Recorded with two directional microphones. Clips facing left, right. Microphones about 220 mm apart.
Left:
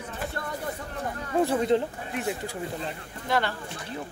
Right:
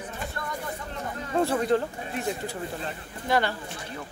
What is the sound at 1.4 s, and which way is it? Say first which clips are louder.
Speech: left 1 dB; 20° left (ahead or behind).